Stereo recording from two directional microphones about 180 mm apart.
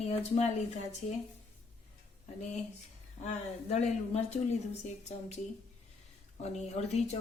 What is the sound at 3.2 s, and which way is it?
Speech, 35° left (ahead or behind).